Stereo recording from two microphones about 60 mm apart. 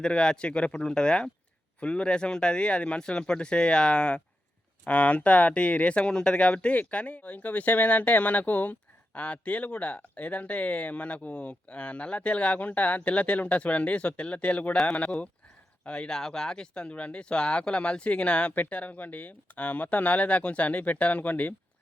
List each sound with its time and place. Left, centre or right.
0.0 s speech: centre